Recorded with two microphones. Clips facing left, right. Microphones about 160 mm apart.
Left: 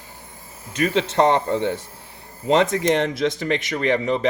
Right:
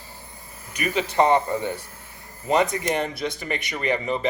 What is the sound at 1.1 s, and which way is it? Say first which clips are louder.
Speech: right 1 dB; 80° left.